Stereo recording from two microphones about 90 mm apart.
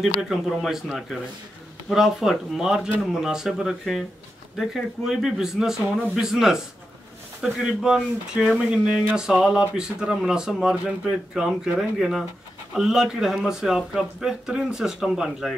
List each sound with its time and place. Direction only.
0.0 s a man's voice: 5° right (ahead or behind)
7.6 s a man's voice: 5° right (ahead or behind)